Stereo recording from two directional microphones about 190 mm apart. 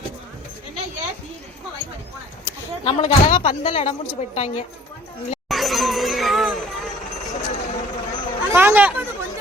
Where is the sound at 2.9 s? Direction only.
30° left (ahead or behind).